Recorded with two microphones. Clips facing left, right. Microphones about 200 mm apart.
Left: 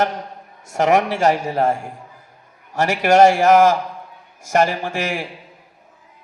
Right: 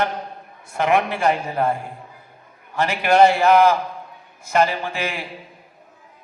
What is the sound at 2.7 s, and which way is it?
A man's voice, 45° left (ahead or behind).